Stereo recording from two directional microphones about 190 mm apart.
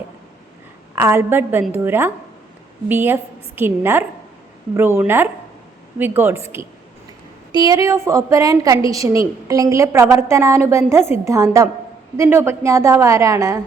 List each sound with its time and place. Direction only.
0.9 s a woman's voice: 15° right (ahead or behind)
7.5 s a woman's voice: 20° right (ahead or behind)